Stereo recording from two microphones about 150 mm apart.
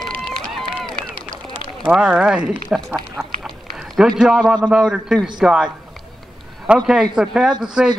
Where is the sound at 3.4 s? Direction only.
Centre (ahead or behind).